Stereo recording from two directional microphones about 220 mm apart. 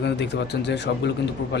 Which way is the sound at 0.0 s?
50° left (ahead or behind).